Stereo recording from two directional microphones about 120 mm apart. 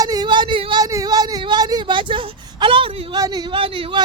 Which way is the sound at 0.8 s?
30° right (ahead or behind).